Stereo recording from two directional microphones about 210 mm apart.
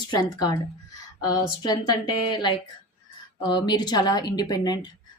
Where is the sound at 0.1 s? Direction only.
20° left (ahead or behind).